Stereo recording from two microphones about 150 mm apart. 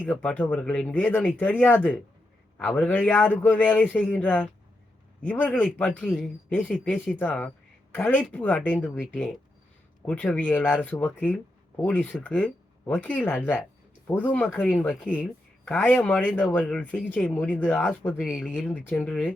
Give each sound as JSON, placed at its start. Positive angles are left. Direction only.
{"t": 0.0, "sound": "speech", "side_deg": 10}
{"t": 18.5, "sound": "speech", "side_deg": 10}